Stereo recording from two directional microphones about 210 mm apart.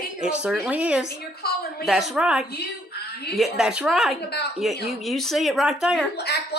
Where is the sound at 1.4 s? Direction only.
50° left (ahead or behind).